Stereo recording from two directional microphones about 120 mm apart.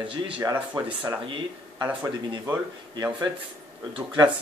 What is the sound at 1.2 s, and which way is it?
Speech, 45° right (ahead or behind).